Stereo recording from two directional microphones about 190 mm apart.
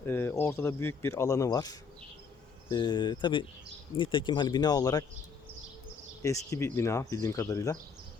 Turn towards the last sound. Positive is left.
turn(degrees=15)  # may be behind; listen again after turning